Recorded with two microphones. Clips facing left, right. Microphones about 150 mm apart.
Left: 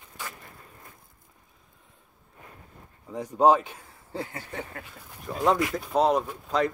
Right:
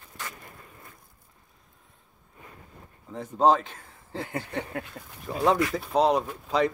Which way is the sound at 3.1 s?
15° left (ahead or behind).